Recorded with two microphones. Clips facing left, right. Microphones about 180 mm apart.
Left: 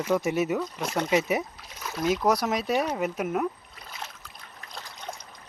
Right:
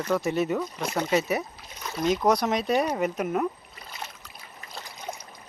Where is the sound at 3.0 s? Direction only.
5° left (ahead or behind).